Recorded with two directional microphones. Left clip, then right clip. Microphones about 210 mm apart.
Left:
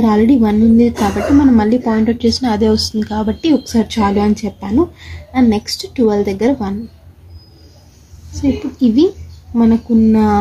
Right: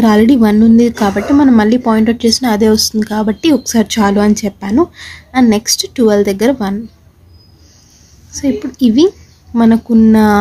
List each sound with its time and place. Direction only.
0.0 s a woman's voice: 40° right (ahead or behind)
8.4 s a woman's voice: 40° right (ahead or behind)